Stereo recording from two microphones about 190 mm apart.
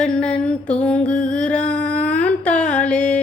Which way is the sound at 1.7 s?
5° left (ahead or behind).